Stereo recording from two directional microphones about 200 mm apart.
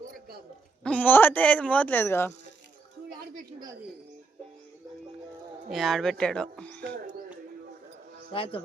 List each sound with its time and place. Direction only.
0.9 s a man's voice: 10° left (ahead or behind)
5.7 s speech: centre (ahead or behind)
8.3 s a man's voice: 25° left (ahead or behind)